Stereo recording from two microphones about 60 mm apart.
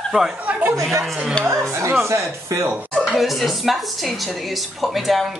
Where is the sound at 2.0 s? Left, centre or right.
Right.